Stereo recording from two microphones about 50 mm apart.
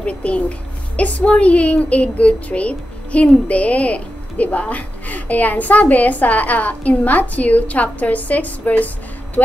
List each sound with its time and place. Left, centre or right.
0.0 s a woman's voice: left